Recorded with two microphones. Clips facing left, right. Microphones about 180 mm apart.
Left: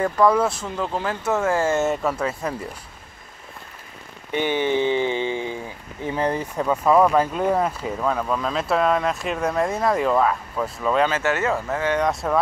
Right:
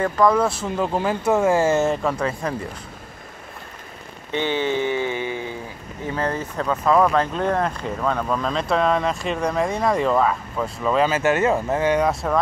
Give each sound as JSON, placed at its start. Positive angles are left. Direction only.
{"t": 0.0, "sound": "speech", "side_deg": 10}
{"t": 0.7, "sound": "speech", "side_deg": -10}
{"t": 1.8, "sound": "speech", "side_deg": 5}
{"t": 4.3, "sound": "speech", "side_deg": 15}
{"t": 12.1, "sound": "speech", "side_deg": 0}